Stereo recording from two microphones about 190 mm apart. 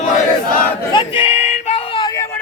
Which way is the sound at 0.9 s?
25° left (ahead or behind).